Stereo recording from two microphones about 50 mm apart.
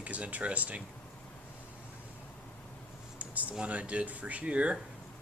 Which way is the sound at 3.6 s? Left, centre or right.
Right.